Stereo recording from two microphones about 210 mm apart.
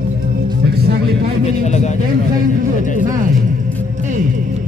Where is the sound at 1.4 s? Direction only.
35° left (ahead or behind).